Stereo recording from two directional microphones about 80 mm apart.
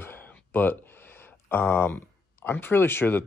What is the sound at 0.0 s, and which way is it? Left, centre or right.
Speech, left.